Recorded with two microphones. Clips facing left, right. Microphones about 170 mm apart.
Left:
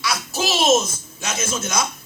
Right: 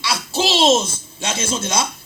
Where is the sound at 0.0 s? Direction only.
30° right (ahead or behind).